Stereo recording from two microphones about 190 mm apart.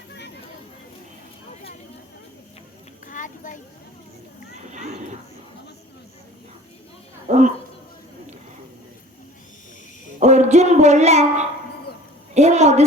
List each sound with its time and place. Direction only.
3.1 s children playing: 40° left (ahead or behind)
7.3 s a sound: 40° right (ahead or behind)
10.2 s a woman's voice: 35° right (ahead or behind)